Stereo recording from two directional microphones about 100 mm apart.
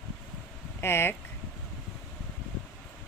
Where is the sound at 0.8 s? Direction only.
25° left (ahead or behind).